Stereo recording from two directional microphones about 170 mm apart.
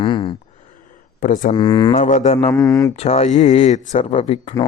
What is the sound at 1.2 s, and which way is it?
Speech, 50° left (ahead or behind).